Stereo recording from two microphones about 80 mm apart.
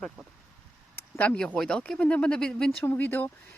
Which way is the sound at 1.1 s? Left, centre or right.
Centre.